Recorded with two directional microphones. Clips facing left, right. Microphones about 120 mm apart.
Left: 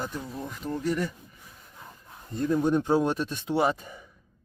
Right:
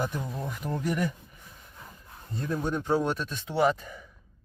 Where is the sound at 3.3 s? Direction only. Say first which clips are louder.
Even; 20° left (ahead or behind).